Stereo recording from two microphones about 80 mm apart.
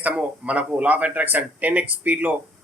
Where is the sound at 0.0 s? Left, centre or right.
Centre.